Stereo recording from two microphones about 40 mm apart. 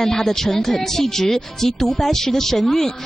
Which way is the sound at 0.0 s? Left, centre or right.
Centre.